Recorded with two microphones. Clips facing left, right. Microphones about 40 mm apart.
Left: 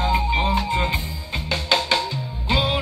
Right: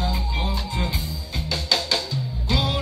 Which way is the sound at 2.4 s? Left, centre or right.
Left.